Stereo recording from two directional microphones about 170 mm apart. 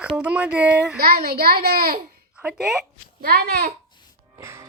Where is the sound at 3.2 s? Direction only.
65° right (ahead or behind).